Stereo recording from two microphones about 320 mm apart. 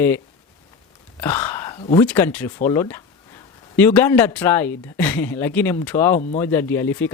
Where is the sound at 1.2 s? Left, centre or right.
Centre.